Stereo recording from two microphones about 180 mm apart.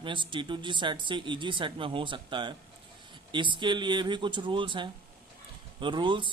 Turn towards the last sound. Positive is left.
turn(degrees=-25)  # may be behind; listen again after turning